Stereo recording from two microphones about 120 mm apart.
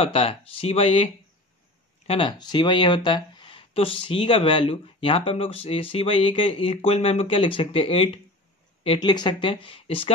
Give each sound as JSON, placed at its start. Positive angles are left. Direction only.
{"t": 0.0, "sound": "speech", "side_deg": 50}